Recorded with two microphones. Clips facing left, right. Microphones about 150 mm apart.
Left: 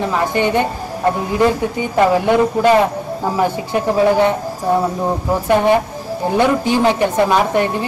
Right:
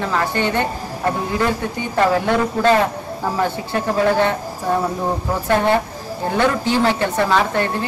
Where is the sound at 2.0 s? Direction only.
15° left (ahead or behind).